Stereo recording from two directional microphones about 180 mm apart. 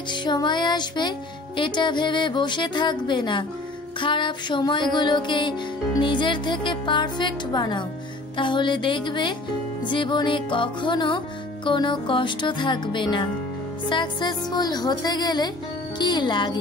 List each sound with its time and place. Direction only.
0.1 s music: 25° left (ahead or behind)